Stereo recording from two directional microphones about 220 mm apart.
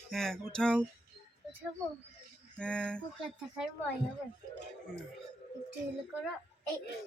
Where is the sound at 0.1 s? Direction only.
Centre (ahead or behind).